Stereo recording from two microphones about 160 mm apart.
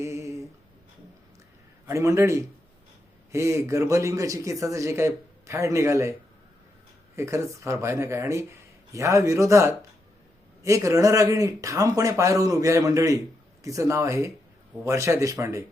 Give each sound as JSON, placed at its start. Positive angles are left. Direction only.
{"t": 0.0, "sound": "a sound", "side_deg": -15}
{"t": 1.9, "sound": "speech", "side_deg": -20}
{"t": 7.2, "sound": "speech", "side_deg": -20}